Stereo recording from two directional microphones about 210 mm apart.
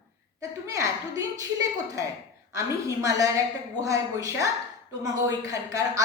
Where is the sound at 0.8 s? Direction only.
15° right (ahead or behind).